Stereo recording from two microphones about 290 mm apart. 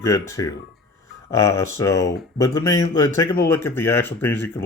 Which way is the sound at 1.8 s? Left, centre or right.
Centre.